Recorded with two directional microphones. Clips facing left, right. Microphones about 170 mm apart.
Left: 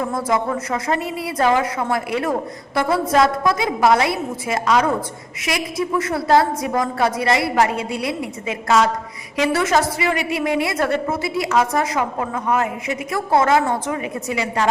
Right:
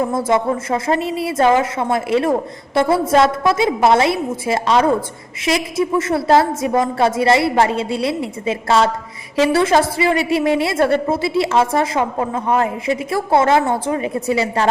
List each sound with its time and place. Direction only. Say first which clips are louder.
0.0 s a woman's voice: right 4 dB; 25° right (ahead or behind)